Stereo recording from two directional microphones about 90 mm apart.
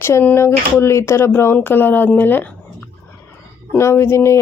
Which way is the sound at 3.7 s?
30° left (ahead or behind).